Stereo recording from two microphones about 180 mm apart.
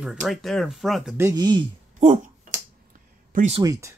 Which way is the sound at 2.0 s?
40° right (ahead or behind).